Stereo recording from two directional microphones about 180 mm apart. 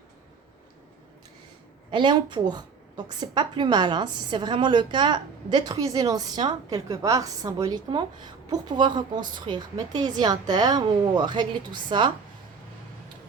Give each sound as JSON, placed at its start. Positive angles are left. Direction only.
{"t": 1.9, "sound": "a woman's voice", "side_deg": -25}